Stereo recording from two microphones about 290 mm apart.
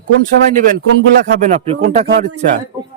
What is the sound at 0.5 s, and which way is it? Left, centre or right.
Speech, right.